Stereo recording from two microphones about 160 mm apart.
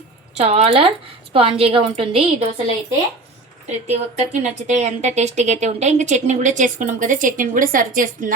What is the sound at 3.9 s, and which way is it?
A woman's voice, 45° right (ahead or behind).